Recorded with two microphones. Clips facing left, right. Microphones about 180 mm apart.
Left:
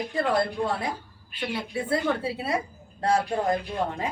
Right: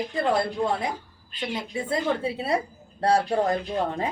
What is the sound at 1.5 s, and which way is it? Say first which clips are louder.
Speech: left 1 dB; 20° right (ahead or behind).